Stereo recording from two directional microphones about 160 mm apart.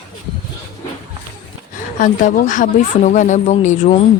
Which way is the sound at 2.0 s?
55° left (ahead or behind).